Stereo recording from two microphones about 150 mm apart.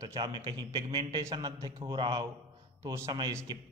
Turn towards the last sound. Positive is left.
turn(degrees=-30)  # may be behind; listen again after turning